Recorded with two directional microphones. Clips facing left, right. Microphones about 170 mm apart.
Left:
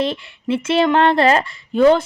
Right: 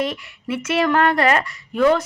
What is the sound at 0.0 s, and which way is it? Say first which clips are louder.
A woman's voice: left 3 dB; 30° left (ahead or behind).